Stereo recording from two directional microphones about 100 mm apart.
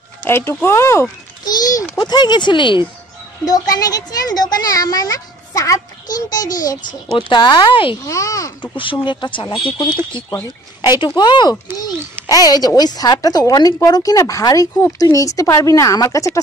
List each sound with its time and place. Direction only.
0.2 s speech: 25° left (ahead or behind)
1.4 s a child's voice: 40° left (ahead or behind)
3.4 s speech: 40° left (ahead or behind)
7.2 s speech: 50° left (ahead or behind)
8.0 s speech: 35° left (ahead or behind)
8.7 s speech: 55° left (ahead or behind)
10.8 s speech: 45° left (ahead or behind)